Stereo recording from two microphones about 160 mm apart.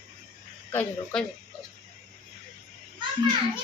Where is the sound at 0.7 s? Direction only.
5° left (ahead or behind).